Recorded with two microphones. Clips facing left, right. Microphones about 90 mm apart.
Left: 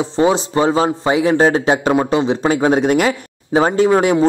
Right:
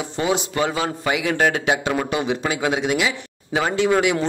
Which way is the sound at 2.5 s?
40° left (ahead or behind).